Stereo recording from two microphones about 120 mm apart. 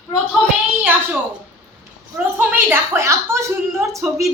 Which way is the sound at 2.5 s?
15° right (ahead or behind).